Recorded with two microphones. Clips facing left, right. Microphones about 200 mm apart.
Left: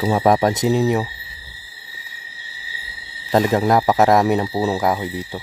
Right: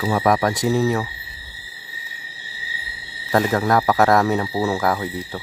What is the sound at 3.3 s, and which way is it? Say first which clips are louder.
Speech: left 2 dB; 20° left (ahead or behind).